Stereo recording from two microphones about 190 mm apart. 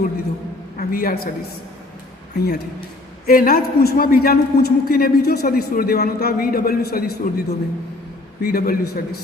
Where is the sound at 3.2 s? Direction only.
50° left (ahead or behind).